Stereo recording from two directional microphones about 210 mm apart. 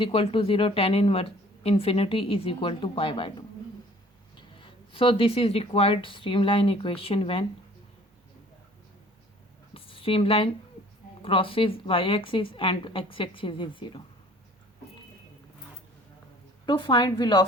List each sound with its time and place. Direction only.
0.0 s a woman's voice: 25° left (ahead or behind)
4.4 s speech: 25° left (ahead or behind)
9.7 s a sound: 25° left (ahead or behind)
11.2 s a woman's voice: 25° left (ahead or behind)
16.6 s a woman's voice: 25° left (ahead or behind)